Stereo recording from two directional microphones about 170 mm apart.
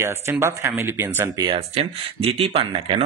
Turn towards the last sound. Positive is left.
turn(degrees=-35)  # may be behind; listen again after turning